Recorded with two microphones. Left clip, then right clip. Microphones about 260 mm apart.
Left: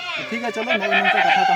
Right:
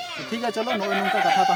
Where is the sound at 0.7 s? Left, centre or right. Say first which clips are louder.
Left 8 dB; right.